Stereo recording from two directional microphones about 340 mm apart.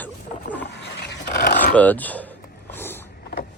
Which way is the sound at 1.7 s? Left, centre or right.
Centre.